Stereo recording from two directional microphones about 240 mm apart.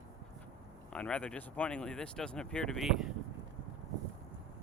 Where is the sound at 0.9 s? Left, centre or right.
Centre.